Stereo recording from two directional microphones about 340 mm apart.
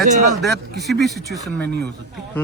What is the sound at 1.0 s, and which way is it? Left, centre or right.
Speech, centre.